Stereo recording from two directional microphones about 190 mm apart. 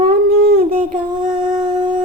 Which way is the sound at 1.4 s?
25° right (ahead or behind).